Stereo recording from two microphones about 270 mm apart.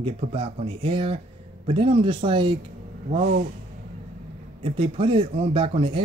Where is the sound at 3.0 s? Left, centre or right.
Right.